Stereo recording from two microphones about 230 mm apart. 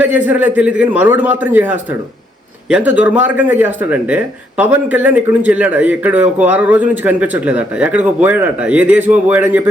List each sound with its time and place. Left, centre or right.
0.0 s speech: centre